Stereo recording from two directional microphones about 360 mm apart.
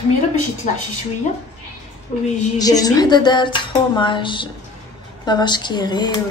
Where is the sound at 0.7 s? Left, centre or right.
Left.